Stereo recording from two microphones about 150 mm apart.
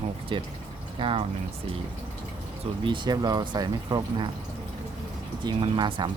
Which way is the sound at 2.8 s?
30° right (ahead or behind).